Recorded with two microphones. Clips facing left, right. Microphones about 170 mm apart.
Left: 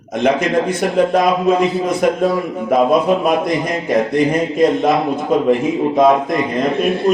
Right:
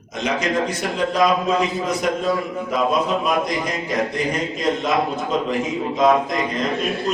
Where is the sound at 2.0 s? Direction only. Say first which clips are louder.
Left 7 dB; 55° left (ahead or behind).